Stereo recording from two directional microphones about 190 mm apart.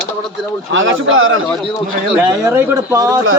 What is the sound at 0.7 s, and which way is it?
Speech, 90° right.